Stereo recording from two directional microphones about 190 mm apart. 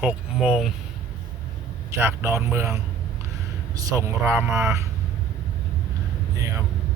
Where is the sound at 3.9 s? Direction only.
15° right (ahead or behind).